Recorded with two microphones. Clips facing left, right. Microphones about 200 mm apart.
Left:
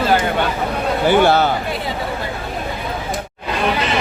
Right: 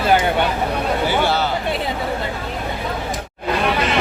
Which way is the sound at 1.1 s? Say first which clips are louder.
Left 10 dB; 50° left (ahead or behind).